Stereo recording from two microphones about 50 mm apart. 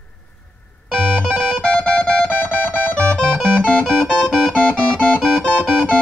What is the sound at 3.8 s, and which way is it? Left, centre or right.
Music, centre.